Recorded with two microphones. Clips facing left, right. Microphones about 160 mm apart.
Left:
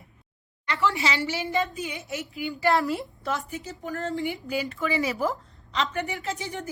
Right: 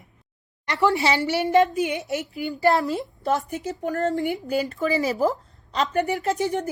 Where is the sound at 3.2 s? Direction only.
45° right (ahead or behind).